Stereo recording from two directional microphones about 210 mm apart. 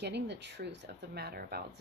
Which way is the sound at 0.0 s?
55° right (ahead or behind).